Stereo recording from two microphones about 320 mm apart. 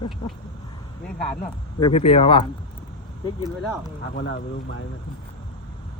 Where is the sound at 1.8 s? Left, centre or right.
Centre.